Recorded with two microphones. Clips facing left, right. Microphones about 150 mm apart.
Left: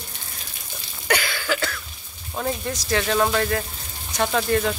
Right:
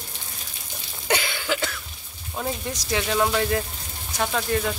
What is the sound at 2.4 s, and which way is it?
Speech, 15° right (ahead or behind).